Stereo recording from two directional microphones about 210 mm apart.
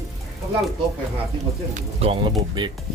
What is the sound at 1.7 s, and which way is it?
Speech, 30° right (ahead or behind).